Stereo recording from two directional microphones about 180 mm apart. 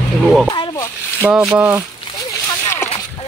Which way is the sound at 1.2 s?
5° right (ahead or behind).